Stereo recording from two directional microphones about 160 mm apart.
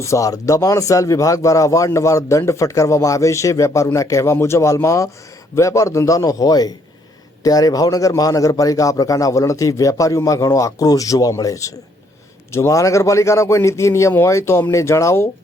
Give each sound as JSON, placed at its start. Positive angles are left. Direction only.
{"t": 0.0, "sound": "speech", "side_deg": 20}